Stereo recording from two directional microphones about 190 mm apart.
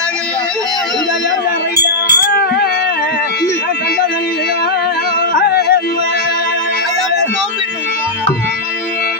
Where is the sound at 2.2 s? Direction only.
50° left (ahead or behind).